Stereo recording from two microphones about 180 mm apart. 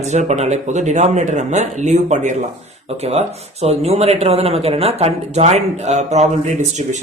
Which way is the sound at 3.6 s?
35° right (ahead or behind).